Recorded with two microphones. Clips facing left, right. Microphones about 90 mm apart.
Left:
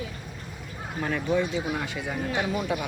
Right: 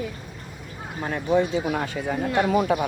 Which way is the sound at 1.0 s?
35° right (ahead or behind).